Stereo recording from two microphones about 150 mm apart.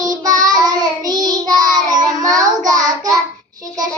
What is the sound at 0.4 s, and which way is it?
Child singing, 25° right (ahead or behind).